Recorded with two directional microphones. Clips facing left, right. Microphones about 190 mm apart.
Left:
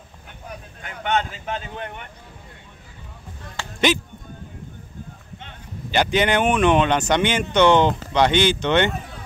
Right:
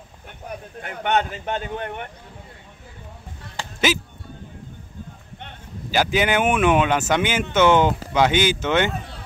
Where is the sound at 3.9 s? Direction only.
5° right (ahead or behind).